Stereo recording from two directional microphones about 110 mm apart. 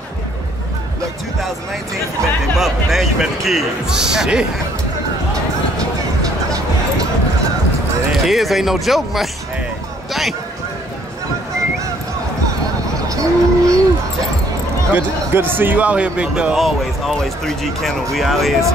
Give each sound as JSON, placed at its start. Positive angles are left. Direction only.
{"t": 2.6, "sound": "speech", "side_deg": -5}
{"t": 8.1, "sound": "speech", "side_deg": 0}
{"t": 13.1, "sound": "a sound", "side_deg": -30}
{"t": 15.0, "sound": "a man's voice", "side_deg": -20}